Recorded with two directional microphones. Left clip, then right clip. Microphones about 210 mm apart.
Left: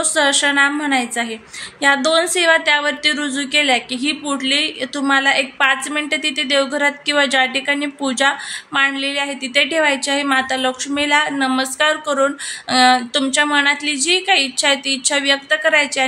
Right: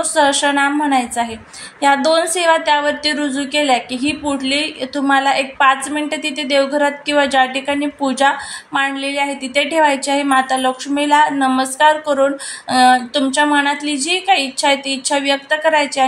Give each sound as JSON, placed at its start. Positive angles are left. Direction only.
{"t": 0.0, "sound": "a woman's voice", "side_deg": 10}